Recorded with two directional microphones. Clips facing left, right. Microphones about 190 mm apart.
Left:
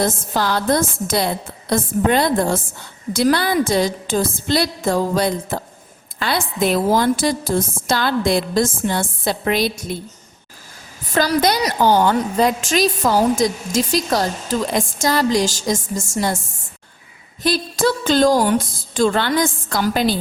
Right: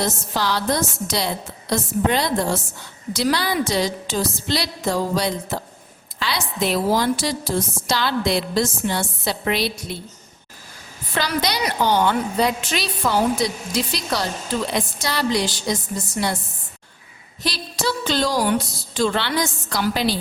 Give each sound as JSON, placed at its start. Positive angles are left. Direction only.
{"t": 0.0, "sound": "a woman's voice", "side_deg": 50}
{"t": 11.1, "sound": "a woman's voice", "side_deg": 45}
{"t": 17.4, "sound": "a woman's voice", "side_deg": 50}